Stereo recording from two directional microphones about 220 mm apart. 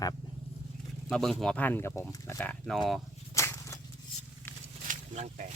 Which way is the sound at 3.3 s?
15° left (ahead or behind).